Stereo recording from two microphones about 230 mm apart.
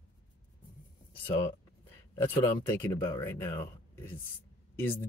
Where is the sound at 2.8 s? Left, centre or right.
Centre.